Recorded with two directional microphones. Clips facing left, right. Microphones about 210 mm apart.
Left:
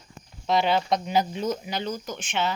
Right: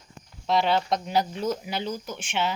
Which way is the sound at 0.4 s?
Centre (ahead or behind).